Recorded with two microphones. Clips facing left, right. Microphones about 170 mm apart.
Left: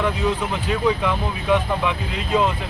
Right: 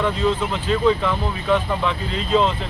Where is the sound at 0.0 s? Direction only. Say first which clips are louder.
Right 1 dB; 10° left (ahead or behind).